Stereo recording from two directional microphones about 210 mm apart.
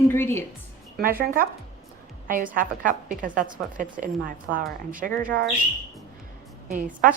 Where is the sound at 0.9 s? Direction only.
45° right (ahead or behind).